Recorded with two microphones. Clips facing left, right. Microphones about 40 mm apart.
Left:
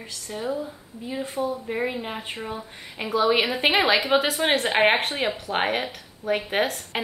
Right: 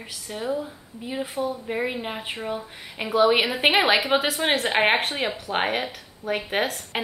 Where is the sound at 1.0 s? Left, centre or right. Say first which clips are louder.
Even; centre.